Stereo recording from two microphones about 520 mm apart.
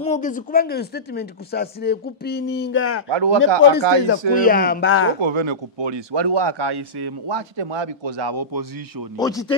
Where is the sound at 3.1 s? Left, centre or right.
Right.